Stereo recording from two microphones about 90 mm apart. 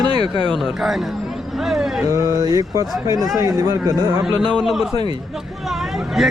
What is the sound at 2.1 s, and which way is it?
Speech, 35° right (ahead or behind).